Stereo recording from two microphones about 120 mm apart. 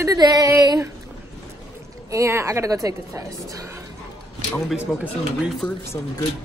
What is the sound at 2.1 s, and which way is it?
A woman's voice, 25° right (ahead or behind).